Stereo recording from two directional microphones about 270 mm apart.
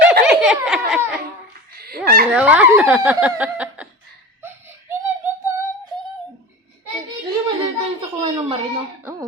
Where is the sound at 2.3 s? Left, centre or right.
Centre.